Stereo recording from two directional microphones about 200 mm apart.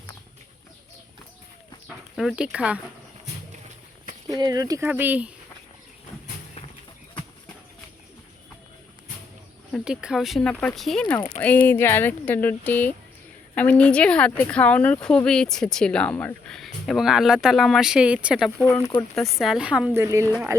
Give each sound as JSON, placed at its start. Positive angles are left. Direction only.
{"t": 2.1, "sound": "speech", "side_deg": -5}
{"t": 4.3, "sound": "speech", "side_deg": -20}
{"t": 9.7, "sound": "speech", "side_deg": -5}
{"t": 18.6, "sound": "speech", "side_deg": 15}
{"t": 19.4, "sound": "speech", "side_deg": -5}